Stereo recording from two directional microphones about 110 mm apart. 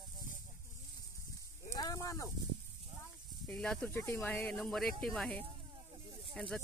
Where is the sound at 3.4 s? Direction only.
10° left (ahead or behind).